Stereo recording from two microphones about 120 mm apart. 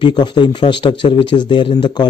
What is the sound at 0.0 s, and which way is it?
A man's voice, 40° left (ahead or behind).